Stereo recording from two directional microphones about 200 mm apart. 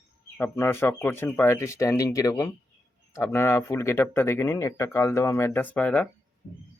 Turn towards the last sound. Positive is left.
turn(degrees=5)  # may be behind; listen again after turning